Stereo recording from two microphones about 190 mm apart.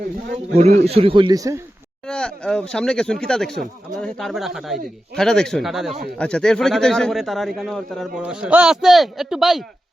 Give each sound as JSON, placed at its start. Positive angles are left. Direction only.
{"t": 0.5, "sound": "a man's voice", "side_deg": -35}
{"t": 2.0, "sound": "speech", "side_deg": 5}